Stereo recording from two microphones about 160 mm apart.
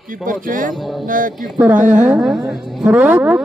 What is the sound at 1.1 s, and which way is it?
Speech, 55° right (ahead or behind).